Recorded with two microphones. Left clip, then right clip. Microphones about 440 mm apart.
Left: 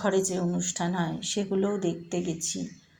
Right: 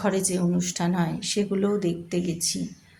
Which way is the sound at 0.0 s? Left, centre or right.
Right.